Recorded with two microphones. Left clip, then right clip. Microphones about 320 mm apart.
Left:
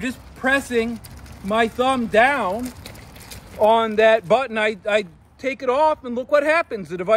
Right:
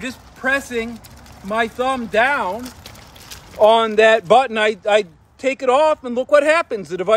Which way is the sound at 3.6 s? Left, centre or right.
Right.